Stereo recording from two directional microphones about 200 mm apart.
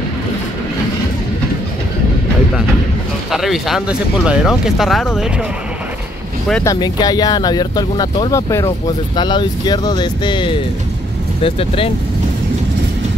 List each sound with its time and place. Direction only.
3.3 s speech: centre (ahead or behind)
6.6 s speech: 20° left (ahead or behind)